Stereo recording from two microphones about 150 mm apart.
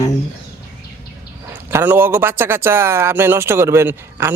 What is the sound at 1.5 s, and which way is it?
A man's voice, 15° right (ahead or behind).